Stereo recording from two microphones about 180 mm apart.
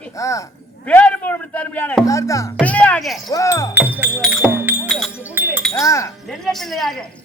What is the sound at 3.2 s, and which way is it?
Speech, 20° left (ahead or behind).